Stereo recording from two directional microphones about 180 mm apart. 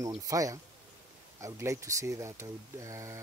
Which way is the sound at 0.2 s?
20° right (ahead or behind).